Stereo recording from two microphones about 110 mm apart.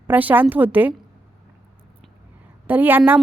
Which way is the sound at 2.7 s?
20° right (ahead or behind).